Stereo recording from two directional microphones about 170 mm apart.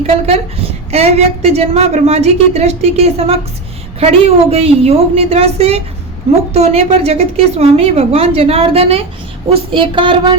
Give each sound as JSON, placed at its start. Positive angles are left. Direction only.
{"t": 0.1, "sound": "a woman's voice", "side_deg": -35}